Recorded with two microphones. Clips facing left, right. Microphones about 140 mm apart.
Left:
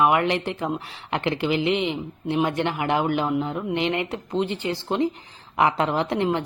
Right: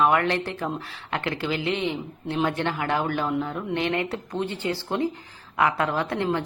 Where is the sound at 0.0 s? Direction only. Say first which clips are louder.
Left 1 dB; 15° left (ahead or behind).